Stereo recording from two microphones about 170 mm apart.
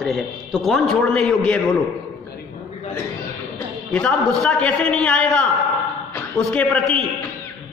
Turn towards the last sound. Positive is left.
turn(degrees=10)  # may be behind; listen again after turning